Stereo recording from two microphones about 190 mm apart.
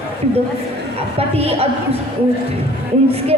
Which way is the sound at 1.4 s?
30° right (ahead or behind).